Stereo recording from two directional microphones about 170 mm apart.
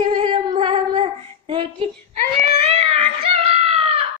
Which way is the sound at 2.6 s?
40° right (ahead or behind).